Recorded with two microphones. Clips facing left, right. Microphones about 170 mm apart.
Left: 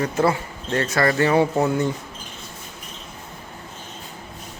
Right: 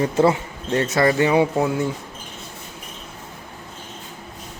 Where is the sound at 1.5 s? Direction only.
5° right (ahead or behind).